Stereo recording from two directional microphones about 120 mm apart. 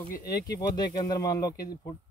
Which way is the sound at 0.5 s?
35° left (ahead or behind).